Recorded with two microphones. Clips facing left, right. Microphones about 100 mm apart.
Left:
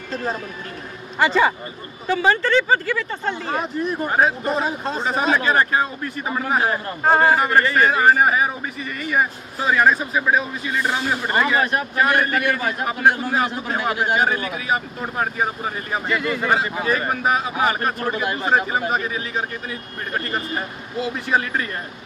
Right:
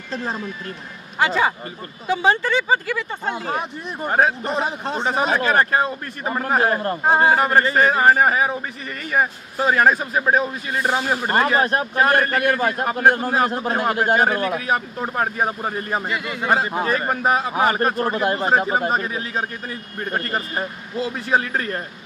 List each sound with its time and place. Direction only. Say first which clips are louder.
1.2 s speech: left 2 dB; 5° right (ahead or behind)
2.0 s speech: even; 20° right (ahead or behind)
4.5 s speech: left 1 dB; 25° right (ahead or behind)
5.4 s a man's voice: right 1 dB; 45° right (ahead or behind)
7.0 s speech: left 2 dB; 10° right (ahead or behind)
7.3 s a man's voice: even; 35° right (ahead or behind); by 14.7 s 50° right (ahead or behind)
16.1 s speech: left 3 dB; 5° right (ahead or behind)
16.5 s a man's voice: right 1 dB; 35° right (ahead or behind)